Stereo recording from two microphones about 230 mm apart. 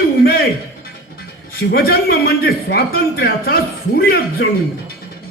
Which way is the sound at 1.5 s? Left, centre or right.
Left.